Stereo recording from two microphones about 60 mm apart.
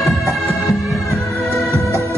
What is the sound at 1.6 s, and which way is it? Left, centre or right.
Music, left.